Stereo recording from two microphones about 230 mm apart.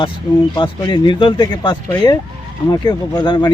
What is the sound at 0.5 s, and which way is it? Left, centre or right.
Speech, centre.